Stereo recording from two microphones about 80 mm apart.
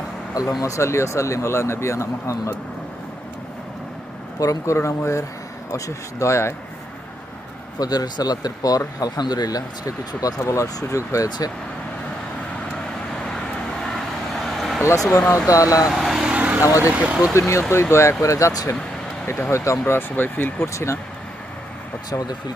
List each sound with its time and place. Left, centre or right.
0.6 s speech: left
4.4 s speech: left
7.8 s speech: left
10.4 s speech: left
13.9 s vehicle: centre
14.8 s speech: left
15.9 s vehicle: centre
16.6 s speech: left
16.9 s speech: centre
17.5 s speech: left
19.9 s speech: left